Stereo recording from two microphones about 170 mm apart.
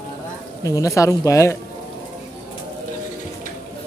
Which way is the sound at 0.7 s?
20° left (ahead or behind).